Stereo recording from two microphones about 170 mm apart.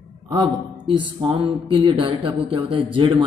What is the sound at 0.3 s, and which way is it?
A man's voice, 25° right (ahead or behind).